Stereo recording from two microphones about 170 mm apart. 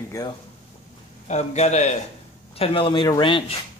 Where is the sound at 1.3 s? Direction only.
40° left (ahead or behind).